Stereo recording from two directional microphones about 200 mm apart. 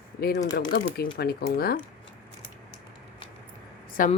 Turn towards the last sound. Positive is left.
turn(degrees=45)  # may be behind; listen again after turning